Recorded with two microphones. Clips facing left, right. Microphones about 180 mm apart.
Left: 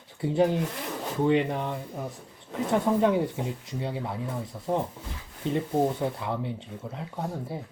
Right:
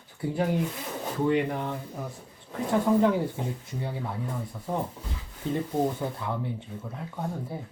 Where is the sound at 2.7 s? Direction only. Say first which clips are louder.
Right 1 dB; 20° left (ahead or behind).